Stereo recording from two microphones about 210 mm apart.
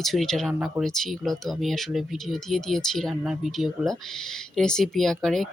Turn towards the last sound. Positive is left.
turn(degrees=0)  # may be behind; listen again after turning